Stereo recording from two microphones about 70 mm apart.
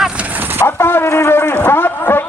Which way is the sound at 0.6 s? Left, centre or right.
Left.